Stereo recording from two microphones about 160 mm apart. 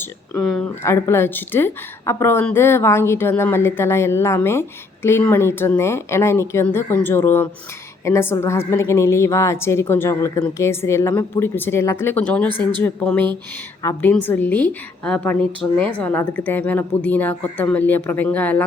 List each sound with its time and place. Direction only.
0.0 s speech: 5° left (ahead or behind)
0.8 s a woman's voice: 15° left (ahead or behind)